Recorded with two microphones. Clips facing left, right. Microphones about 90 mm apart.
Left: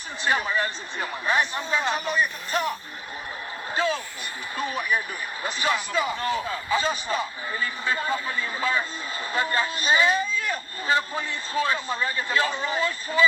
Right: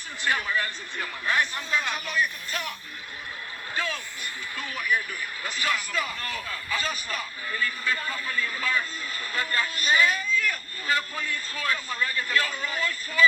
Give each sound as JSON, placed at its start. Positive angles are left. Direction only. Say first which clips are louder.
{"t": 0.3, "sound": "a man's voice", "louder": "left 3 dB", "side_deg": 25}
{"t": 3.8, "sound": "a man's voice", "louder": "left 6 dB", "side_deg": 25}